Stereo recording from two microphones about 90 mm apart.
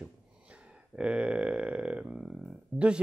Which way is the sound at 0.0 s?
15° right (ahead or behind).